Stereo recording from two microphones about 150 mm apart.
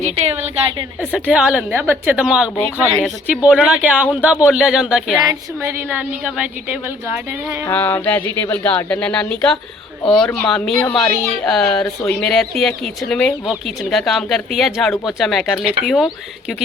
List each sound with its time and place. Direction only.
1.1 s a woman's voice: 5° right (ahead or behind)
5.5 s a woman's voice: 15° right (ahead or behind)
7.6 s speech: 10° left (ahead or behind)